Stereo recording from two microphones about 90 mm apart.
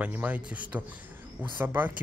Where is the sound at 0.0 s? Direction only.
20° right (ahead or behind).